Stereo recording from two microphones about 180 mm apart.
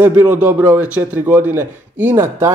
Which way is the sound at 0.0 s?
10° right (ahead or behind).